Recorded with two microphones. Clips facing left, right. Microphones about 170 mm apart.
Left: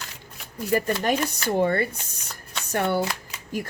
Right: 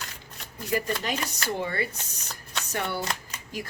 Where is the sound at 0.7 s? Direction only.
50° left (ahead or behind).